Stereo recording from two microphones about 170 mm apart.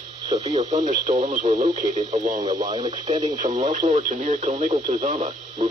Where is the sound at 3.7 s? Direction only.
45° right (ahead or behind).